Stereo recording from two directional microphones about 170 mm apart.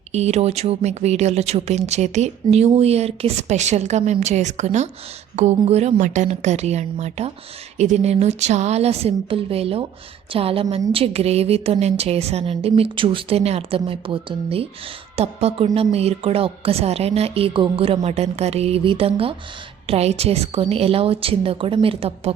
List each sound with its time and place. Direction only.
0.1 s speech: 40° right (ahead or behind)